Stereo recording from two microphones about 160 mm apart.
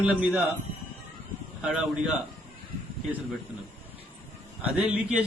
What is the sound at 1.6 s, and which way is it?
Speech, 5° right (ahead or behind).